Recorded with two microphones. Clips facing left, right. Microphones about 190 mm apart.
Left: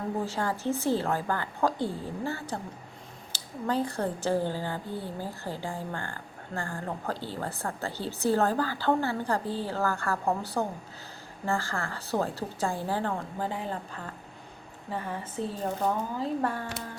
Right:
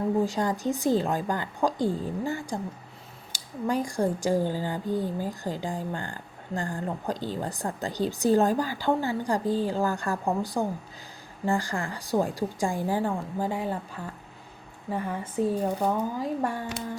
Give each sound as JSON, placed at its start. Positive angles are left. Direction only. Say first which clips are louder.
{"t": 0.3, "sound": "a woman's voice", "louder": "right 3 dB", "side_deg": -15}